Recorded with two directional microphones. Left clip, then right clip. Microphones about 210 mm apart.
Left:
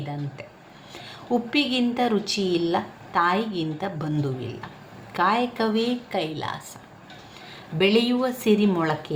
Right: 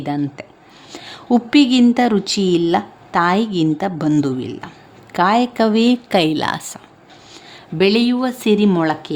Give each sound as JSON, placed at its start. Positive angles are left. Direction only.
{"t": 0.9, "sound": "a woman's voice", "side_deg": -45}
{"t": 7.8, "sound": "a woman's voice", "side_deg": -40}